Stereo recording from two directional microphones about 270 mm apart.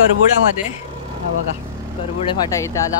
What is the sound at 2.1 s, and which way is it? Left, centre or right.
Speech, centre.